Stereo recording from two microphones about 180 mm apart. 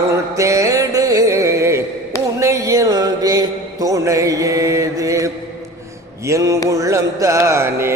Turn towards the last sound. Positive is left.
turn(degrees=-15)  # may be behind; listen again after turning